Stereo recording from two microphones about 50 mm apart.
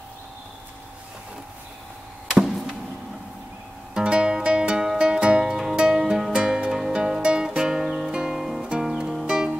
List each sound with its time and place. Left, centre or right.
2.3 s chop: centre
3.9 s music: centre